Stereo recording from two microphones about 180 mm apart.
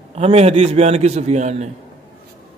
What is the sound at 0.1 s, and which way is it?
A man's voice, 35° right (ahead or behind).